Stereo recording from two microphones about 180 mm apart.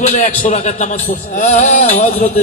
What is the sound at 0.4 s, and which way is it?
A man's voice, 40° left (ahead or behind).